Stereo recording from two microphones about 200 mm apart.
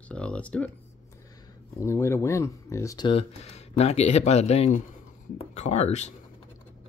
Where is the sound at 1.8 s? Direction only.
15° left (ahead or behind); by 6.1 s 35° left (ahead or behind).